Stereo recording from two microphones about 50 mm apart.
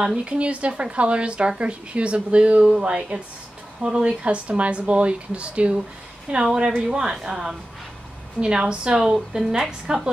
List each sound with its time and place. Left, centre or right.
0.0 s a woman's voice: centre